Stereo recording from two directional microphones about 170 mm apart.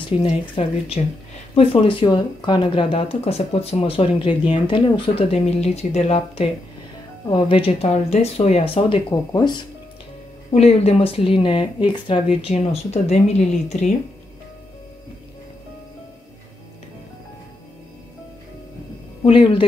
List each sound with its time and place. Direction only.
0.2 s speech: 35° left (ahead or behind)
10.5 s speech: 40° left (ahead or behind)
19.2 s speech: 30° left (ahead or behind)